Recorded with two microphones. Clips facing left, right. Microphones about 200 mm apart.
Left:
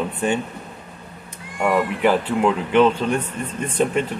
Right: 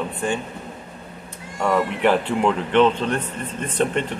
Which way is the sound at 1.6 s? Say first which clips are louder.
Left 1 dB; 5° left (ahead or behind).